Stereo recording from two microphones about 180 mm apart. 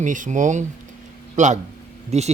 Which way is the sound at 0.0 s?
45° right (ahead or behind).